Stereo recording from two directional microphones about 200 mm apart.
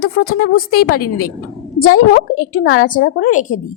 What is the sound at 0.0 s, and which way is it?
A woman's voice, 45° left (ahead or behind).